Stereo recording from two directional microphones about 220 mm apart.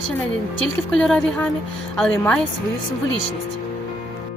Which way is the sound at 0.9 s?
5° left (ahead or behind).